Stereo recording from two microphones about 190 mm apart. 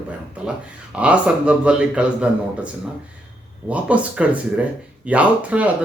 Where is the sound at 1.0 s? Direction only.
5° right (ahead or behind).